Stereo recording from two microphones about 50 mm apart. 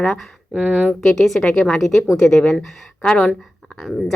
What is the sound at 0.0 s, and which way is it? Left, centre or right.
Speech, centre.